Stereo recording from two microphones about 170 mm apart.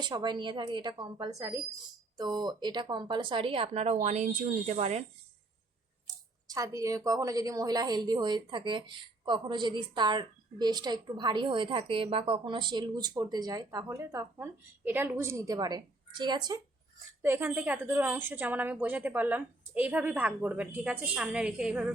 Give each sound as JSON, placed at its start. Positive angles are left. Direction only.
{"t": 0.0, "sound": "a woman's voice", "side_deg": -25}
{"t": 6.5, "sound": "a woman's voice", "side_deg": -20}
{"t": 17.2, "sound": "a woman's voice", "side_deg": -10}